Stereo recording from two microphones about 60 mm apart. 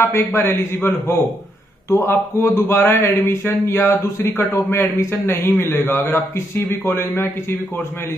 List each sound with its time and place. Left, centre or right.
0.0 s a man's voice: left
0.4 s a man's voice: left